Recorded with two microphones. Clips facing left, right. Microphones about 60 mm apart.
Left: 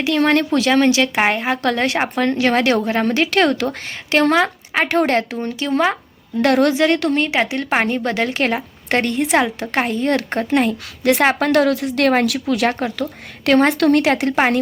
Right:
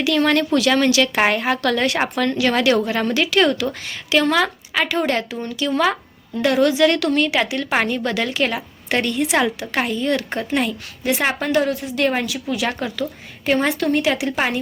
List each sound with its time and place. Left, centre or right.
0.0 s a woman's voice: left
1.1 s a woman's voice: centre
4.9 s a woman's voice: left
6.4 s a woman's voice: left
6.7 s a woman's voice: left
11.0 s speech: left
11.9 s speech: left
13.7 s speech: left
14.1 s a woman's voice: left